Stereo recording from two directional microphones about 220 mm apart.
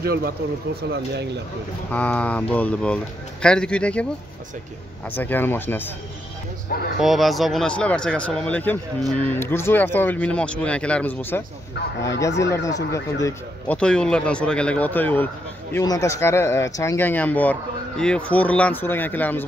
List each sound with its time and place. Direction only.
0.0 s speech: 45° right (ahead or behind)
1.9 s speech: 5° left (ahead or behind)
5.1 s speech: 10° left (ahead or behind)
7.0 s speech: centre (ahead or behind)